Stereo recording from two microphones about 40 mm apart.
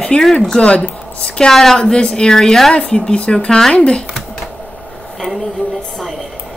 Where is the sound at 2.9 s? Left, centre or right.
Left.